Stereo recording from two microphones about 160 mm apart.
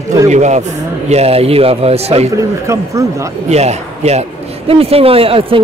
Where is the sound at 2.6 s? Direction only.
20° right (ahead or behind).